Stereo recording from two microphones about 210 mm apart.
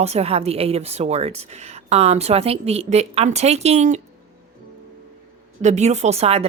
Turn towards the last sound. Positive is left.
turn(degrees=-30)  # may be behind; listen again after turning